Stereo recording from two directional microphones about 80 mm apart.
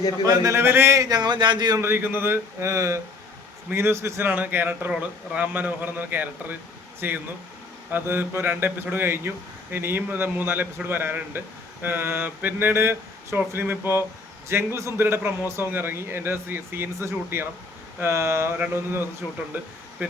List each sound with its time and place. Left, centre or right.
0.3 s a man's voice: right
0.6 s speech: right
1.0 s speech: right
1.8 s speech: right
4.3 s speech: right